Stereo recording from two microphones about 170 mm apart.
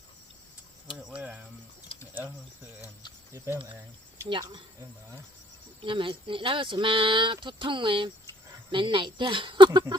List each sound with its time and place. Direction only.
0.9 s speech: 5° right (ahead or behind)
1.9 s typing: 30° left (ahead or behind)
3.3 s speech: 15° right (ahead or behind)
4.3 s speech: 25° right (ahead or behind)
5.8 s speech: 30° right (ahead or behind)